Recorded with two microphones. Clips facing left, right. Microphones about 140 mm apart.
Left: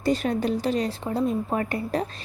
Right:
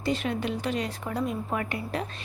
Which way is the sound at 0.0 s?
40° left (ahead or behind).